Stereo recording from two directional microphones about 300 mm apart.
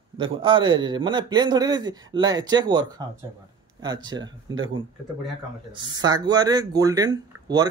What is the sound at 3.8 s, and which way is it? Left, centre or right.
Speech, centre.